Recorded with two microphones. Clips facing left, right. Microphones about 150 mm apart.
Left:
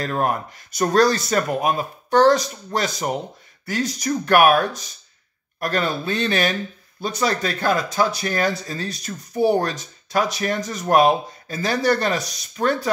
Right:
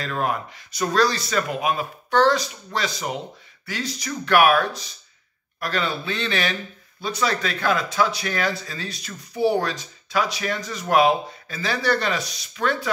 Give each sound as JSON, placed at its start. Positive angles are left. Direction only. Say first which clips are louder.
{"t": 0.0, "sound": "speech", "louder": "left 3 dB", "side_deg": 45}